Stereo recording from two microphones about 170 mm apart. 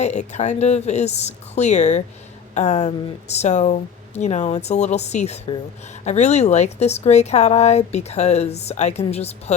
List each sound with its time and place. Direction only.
0.0 s speech: 40° left (ahead or behind)